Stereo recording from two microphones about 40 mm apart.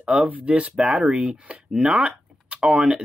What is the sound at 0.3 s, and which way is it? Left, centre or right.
Speech, right.